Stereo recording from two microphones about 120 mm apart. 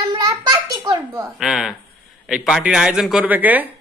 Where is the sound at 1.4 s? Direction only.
Centre (ahead or behind).